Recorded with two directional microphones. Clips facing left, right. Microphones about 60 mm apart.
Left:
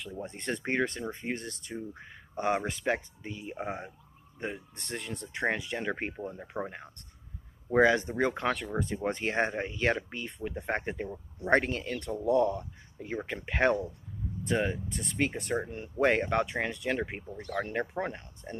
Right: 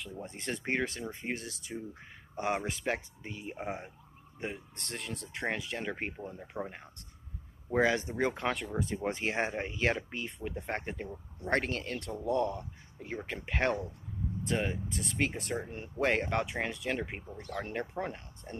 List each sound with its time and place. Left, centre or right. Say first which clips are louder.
0.0 s speech: left 3 dB; centre
3.5 s speech: left 3 dB; centre
6.5 s speech: left 3 dB; left
7.8 s speech: left 4 dB; centre
17.7 s speech: left 3 dB; centre